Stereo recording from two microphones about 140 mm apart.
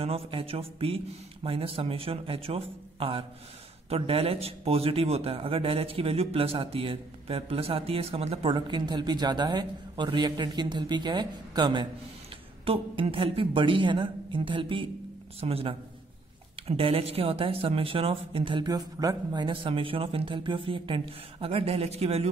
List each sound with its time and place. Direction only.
0.0 s a man's voice: 40° right (ahead or behind)